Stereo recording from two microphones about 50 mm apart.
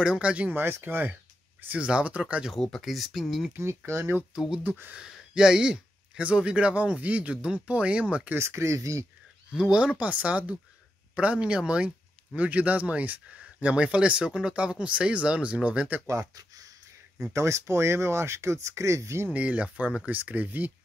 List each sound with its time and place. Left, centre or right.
0.0 s speech: right
0.5 s speech: right
1.7 s speech: right
2.8 s speech: centre
3.6 s speech: right
4.6 s speech: right
5.3 s speech: centre
8.4 s speech: right
9.5 s speech: centre
9.9 s speech: right
17.3 s speech: right
19.3 s speech: right